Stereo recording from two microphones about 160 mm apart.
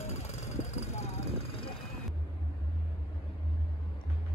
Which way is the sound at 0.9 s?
40° left (ahead or behind).